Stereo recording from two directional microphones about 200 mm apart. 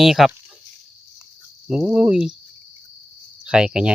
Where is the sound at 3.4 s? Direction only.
5° right (ahead or behind).